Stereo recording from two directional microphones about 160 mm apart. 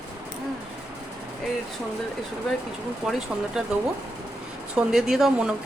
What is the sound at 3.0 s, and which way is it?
Speech, 5° right (ahead or behind).